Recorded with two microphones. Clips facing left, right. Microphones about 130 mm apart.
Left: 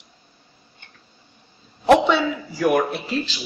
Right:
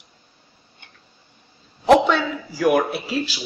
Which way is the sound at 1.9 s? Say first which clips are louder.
Even; centre (ahead or behind).